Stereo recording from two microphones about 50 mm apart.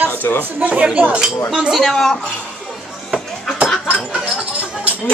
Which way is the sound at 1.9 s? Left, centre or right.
Centre.